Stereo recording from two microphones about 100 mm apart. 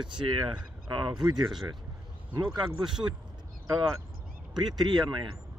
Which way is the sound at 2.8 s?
50° right (ahead or behind).